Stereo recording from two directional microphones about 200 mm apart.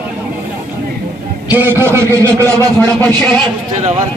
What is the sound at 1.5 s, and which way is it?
A man's voice, 10° right (ahead or behind).